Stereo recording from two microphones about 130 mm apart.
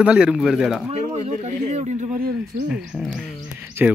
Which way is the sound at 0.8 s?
55° right (ahead or behind).